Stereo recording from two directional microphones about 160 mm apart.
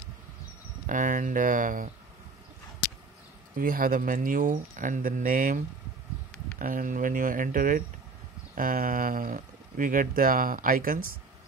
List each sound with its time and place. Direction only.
0.8 s speech: 55° right (ahead or behind)
3.5 s speech: 65° right (ahead or behind)
6.6 s speech: 60° right (ahead or behind)